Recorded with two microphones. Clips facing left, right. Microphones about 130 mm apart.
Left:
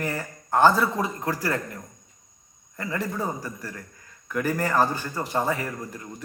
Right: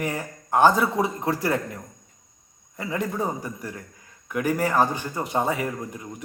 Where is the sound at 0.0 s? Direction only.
15° right (ahead or behind).